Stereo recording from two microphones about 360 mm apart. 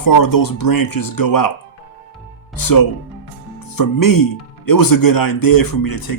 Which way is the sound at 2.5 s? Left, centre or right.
Left.